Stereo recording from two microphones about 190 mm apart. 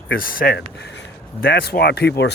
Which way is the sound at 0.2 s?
50° left (ahead or behind).